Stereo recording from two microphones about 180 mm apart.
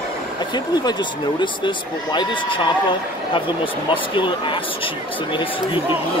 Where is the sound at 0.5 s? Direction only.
25° left (ahead or behind).